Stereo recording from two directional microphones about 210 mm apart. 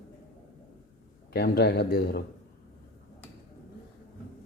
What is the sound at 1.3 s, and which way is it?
Speech, 50° left (ahead or behind).